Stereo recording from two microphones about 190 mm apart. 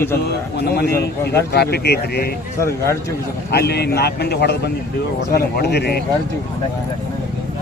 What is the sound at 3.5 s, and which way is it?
Speech, 60° left (ahead or behind).